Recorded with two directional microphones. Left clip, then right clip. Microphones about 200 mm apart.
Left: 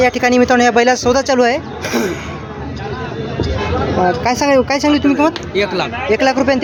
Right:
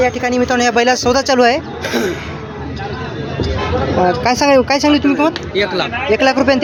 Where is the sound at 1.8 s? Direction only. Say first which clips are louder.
Even; 50° left (ahead or behind).